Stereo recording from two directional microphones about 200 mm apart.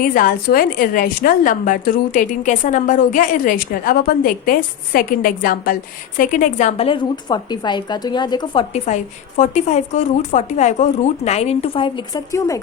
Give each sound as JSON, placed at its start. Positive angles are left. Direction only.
{"t": 0.0, "sound": "a woman's voice", "side_deg": 45}
{"t": 9.4, "sound": "a woman's voice", "side_deg": 35}